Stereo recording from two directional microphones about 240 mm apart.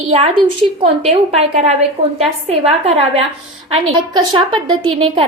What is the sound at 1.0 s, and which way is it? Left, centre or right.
A woman's voice, right.